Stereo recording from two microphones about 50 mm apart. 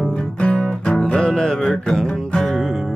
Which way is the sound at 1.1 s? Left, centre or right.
Centre.